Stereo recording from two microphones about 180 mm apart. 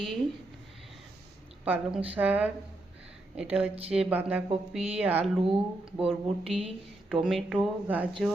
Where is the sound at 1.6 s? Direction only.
10° right (ahead or behind).